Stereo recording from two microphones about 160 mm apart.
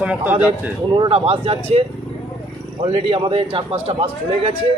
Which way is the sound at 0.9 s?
30° right (ahead or behind).